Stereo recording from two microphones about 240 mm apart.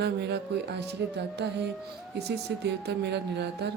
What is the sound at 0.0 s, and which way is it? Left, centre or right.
Speech, right.